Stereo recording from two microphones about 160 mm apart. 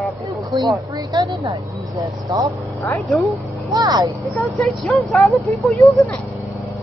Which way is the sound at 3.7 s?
25° right (ahead or behind).